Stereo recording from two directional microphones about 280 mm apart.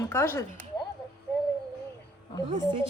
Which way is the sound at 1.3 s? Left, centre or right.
Centre.